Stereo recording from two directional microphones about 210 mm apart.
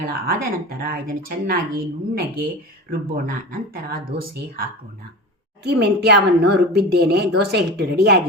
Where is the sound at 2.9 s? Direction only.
45° right (ahead or behind).